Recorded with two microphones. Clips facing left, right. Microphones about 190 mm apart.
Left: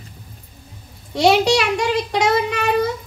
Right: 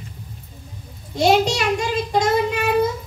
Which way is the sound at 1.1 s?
75° left (ahead or behind).